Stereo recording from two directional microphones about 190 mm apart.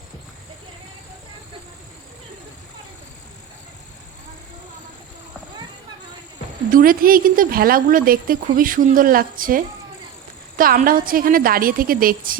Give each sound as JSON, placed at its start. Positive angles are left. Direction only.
{"t": 6.7, "sound": "speech", "side_deg": -45}